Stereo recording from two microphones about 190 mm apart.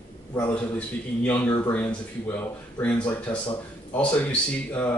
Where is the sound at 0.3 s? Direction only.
10° left (ahead or behind).